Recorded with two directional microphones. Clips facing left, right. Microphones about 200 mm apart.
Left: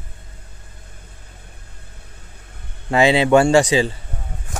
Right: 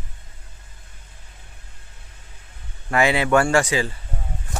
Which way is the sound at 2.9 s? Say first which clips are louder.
Left 5 dB; 25° left (ahead or behind).